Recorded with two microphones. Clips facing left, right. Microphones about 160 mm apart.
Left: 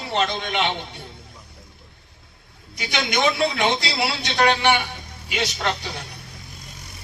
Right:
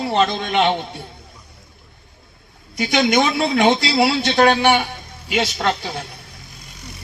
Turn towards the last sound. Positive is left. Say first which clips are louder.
# right 5 dB
turn(degrees=-50)  # may be behind; listen again after turning